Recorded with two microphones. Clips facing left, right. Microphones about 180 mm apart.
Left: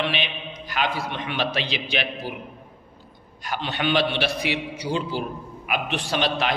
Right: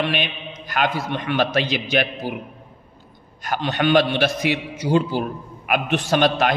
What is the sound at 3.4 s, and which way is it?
A man's voice, 50° right (ahead or behind).